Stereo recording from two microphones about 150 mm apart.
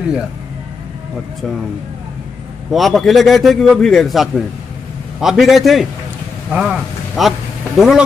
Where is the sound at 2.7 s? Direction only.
Centre (ahead or behind).